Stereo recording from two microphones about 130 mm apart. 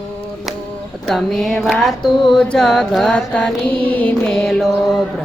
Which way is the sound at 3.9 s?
10° left (ahead or behind).